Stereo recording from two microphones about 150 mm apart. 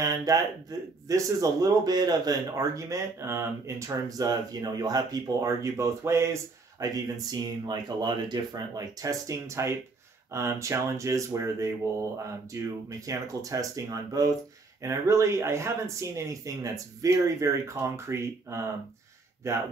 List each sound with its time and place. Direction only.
0.0 s speech: 25° right (ahead or behind)